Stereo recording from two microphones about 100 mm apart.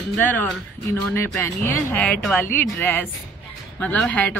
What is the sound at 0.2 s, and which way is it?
A woman's voice, 20° left (ahead or behind).